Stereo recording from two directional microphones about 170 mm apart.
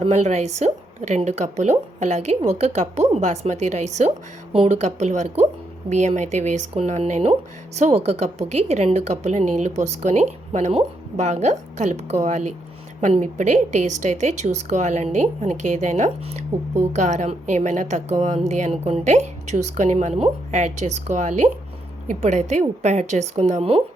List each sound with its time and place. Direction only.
0.0 s a woman's voice: 40° right (ahead or behind)